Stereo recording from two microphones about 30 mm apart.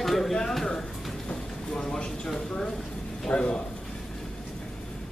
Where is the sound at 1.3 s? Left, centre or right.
Centre.